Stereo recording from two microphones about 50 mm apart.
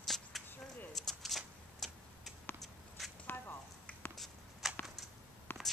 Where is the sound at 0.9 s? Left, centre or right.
Centre.